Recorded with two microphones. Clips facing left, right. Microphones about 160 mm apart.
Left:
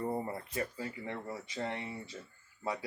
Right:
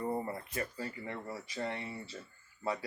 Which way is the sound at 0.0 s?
30° left (ahead or behind).